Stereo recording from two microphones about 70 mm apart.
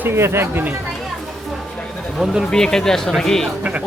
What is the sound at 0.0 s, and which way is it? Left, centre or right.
Speech, right.